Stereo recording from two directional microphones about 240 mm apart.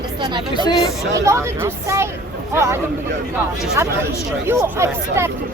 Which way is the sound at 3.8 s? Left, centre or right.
Centre.